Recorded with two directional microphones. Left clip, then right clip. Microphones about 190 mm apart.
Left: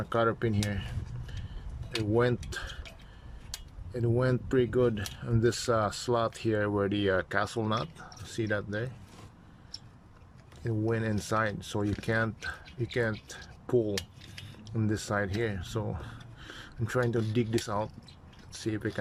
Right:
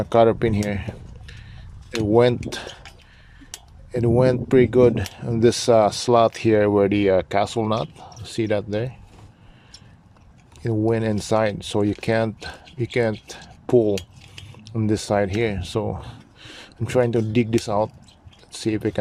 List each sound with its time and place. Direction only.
0.0 s speech: 30° right (ahead or behind)
2.1 s speech: 25° right (ahead or behind)
3.9 s speech: 25° right (ahead or behind)
10.6 s speech: 25° right (ahead or behind)